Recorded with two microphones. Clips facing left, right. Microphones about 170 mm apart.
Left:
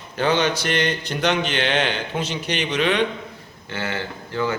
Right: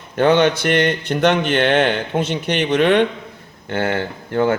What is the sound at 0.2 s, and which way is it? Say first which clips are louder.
A man's voice: right 6 dB; 55° right (ahead or behind).